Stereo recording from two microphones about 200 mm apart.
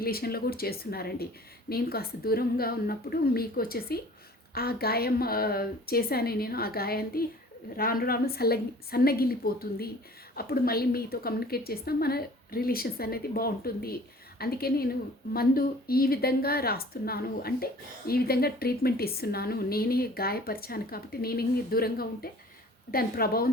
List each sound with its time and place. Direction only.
0.0 s a woman's voice: 50° left (ahead or behind)